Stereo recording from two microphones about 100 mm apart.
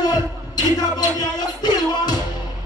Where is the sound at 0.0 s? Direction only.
40° left (ahead or behind).